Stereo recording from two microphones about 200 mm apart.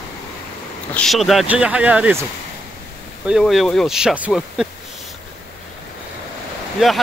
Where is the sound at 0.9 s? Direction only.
Centre (ahead or behind).